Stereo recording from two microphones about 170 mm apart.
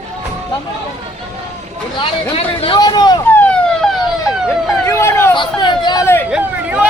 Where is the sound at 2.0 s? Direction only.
35° left (ahead or behind).